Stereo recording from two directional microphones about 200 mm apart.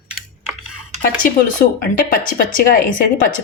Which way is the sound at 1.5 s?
45° left (ahead or behind).